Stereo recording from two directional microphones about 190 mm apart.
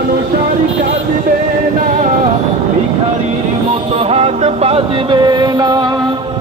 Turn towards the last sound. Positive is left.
turn(degrees=-20)  # may be behind; listen again after turning